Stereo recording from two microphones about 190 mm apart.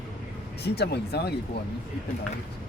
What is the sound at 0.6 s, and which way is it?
Speech, 60° left (ahead or behind).